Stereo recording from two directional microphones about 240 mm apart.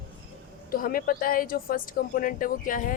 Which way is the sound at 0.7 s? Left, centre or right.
Left.